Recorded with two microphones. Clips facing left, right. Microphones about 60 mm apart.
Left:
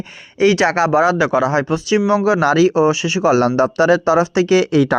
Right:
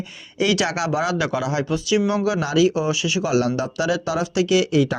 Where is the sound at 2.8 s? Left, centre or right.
Left.